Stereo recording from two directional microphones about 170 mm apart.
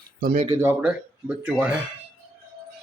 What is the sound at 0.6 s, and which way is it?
Speech, 10° right (ahead or behind).